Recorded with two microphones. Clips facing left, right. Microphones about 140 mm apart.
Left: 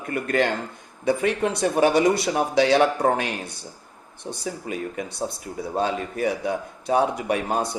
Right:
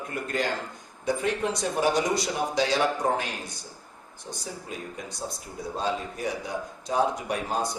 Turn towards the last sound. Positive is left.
turn(degrees=60)  # may be behind; listen again after turning